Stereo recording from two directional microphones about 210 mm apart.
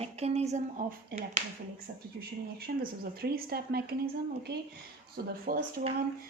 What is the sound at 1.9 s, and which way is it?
Speech, 50° right (ahead or behind).